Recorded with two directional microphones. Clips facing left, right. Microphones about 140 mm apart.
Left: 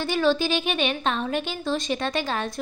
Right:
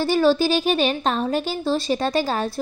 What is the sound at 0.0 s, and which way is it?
A woman's voice, 40° right (ahead or behind).